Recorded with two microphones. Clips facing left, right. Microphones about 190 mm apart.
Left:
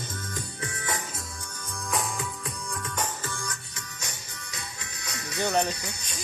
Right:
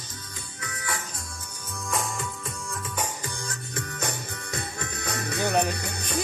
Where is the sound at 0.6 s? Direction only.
25° left (ahead or behind).